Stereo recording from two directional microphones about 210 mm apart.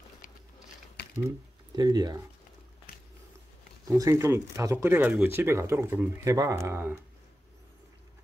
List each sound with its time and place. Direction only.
1.8 s speech: 20° right (ahead or behind)
3.8 s speech: 15° right (ahead or behind)